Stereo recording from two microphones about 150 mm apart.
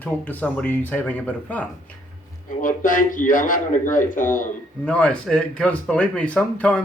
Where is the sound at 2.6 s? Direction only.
65° left (ahead or behind).